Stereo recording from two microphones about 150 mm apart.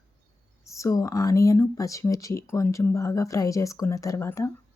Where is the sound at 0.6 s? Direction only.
20° left (ahead or behind).